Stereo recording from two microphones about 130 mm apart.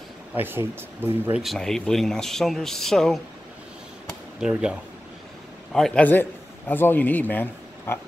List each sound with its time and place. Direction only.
0.3 s speech: 15° right (ahead or behind)
1.4 s speech: centre (ahead or behind)
4.4 s speech: 5° right (ahead or behind)
5.7 s a man's voice: 5° left (ahead or behind)